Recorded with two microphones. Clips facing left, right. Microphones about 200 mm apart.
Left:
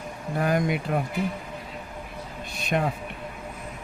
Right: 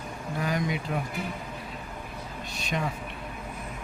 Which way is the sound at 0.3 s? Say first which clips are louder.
Left 5 dB; 55° left (ahead or behind).